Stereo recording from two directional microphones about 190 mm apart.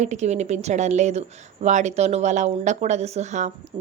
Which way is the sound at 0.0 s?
40° right (ahead or behind).